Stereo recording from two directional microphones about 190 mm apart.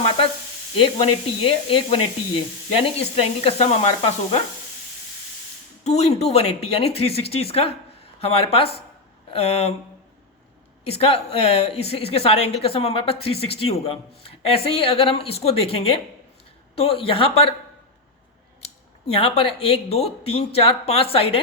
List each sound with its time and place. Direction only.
0.8 s a man's voice: 30° left (ahead or behind)
5.8 s a man's voice: 35° left (ahead or behind)
10.8 s a man's voice: 30° left (ahead or behind)
19.0 s a man's voice: 30° left (ahead or behind)